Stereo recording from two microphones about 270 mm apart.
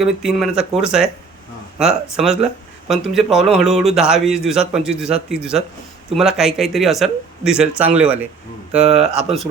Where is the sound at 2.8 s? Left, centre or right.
Centre.